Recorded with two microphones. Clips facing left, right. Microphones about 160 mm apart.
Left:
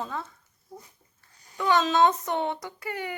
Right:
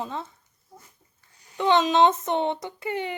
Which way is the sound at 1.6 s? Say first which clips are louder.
Right 3 dB; 25° right (ahead or behind).